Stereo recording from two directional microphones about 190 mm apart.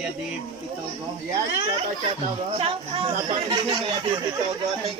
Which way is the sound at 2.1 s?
30° right (ahead or behind).